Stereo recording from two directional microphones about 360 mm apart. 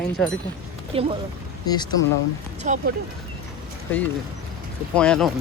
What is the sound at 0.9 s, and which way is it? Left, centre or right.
Speech, centre.